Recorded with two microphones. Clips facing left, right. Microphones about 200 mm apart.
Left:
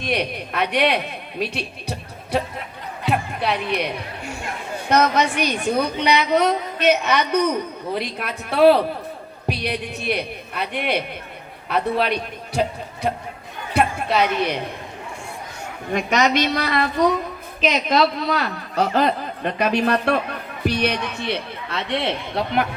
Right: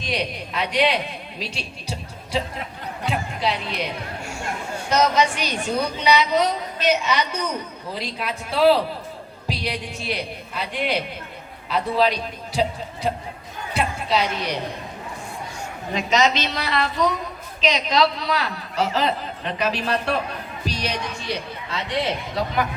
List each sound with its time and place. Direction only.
0.0 s a woman's voice: 55° left (ahead or behind)
4.9 s a woman's voice: 55° left (ahead or behind)
13.7 s a woman's voice: 55° left (ahead or behind)
15.9 s a woman's voice: 55° left (ahead or behind)
21.8 s a man's voice: 15° right (ahead or behind)